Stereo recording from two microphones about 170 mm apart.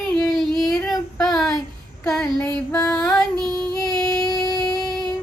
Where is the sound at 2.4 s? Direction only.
5° left (ahead or behind).